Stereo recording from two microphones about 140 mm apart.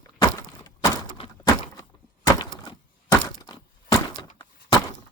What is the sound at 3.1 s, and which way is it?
Crack, 30° left (ahead or behind).